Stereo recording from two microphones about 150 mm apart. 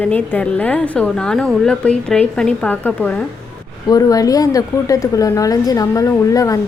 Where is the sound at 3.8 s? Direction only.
25° left (ahead or behind).